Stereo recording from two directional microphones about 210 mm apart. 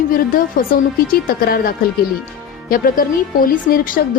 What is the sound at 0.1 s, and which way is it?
A woman's voice, 40° left (ahead or behind).